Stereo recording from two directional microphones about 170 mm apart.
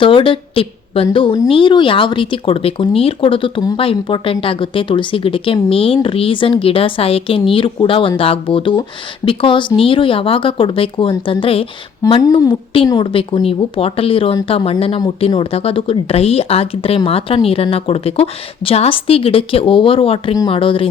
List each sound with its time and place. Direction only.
0.0 s a woman's voice: 30° left (ahead or behind)